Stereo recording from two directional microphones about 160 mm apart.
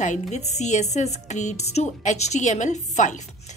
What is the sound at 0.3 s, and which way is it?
A woman's voice, 45° left (ahead or behind).